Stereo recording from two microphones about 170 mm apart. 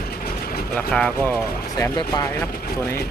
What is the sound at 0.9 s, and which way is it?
Speech, 10° left (ahead or behind).